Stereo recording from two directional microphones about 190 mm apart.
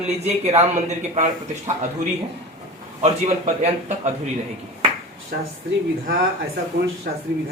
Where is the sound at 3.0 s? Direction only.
35° right (ahead or behind).